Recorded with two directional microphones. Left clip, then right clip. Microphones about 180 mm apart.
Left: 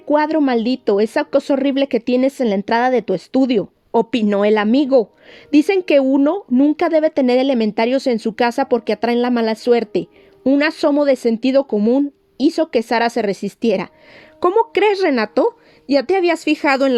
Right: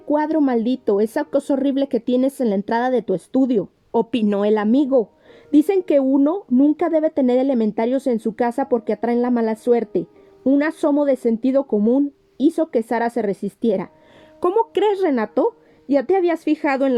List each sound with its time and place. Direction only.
0.1 s a woman's voice: 25° left (ahead or behind)
3.9 s a woman's voice: 35° left (ahead or behind)
7.9 s speech: 45° left (ahead or behind)
11.8 s a woman's voice: 25° left (ahead or behind)
12.9 s speech: 40° left (ahead or behind)
15.1 s speech: 45° left (ahead or behind)